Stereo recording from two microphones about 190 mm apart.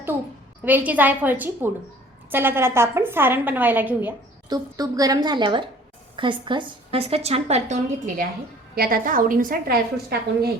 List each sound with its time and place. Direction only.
0.6 s a woman's voice: 10° right (ahead or behind)
4.4 s a woman's voice: 20° right (ahead or behind); by 8.3 s 40° right (ahead or behind)
8.7 s a woman's voice: 50° right (ahead or behind)